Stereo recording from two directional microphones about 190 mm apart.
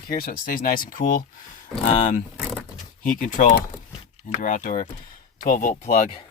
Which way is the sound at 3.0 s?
45° left (ahead or behind).